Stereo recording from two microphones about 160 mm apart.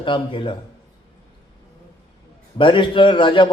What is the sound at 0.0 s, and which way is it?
Speech, 30° left (ahead or behind).